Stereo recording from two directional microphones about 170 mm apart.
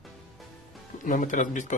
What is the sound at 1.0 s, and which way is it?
Speech, 50° left (ahead or behind).